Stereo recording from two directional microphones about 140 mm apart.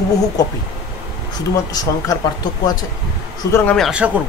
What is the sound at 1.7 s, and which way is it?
Speech, 25° left (ahead or behind).